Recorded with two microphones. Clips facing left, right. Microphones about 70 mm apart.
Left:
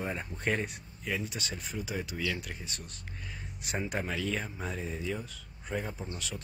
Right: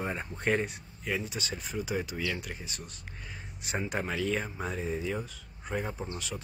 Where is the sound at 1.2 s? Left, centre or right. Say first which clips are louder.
Right 1 dB; centre.